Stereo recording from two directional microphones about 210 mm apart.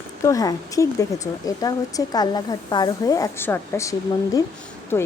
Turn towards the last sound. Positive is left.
turn(degrees=10)  # may be behind; listen again after turning